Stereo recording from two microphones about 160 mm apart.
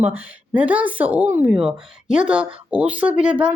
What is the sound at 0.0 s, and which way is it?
A woman's voice, 10° right (ahead or behind).